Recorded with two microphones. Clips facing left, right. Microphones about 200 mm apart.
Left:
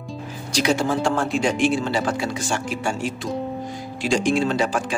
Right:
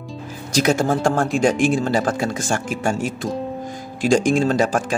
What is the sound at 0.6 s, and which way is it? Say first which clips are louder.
Speech: right 3 dB; 45° right (ahead or behind).